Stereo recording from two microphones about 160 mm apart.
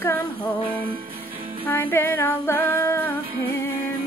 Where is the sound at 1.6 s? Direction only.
15° left (ahead or behind).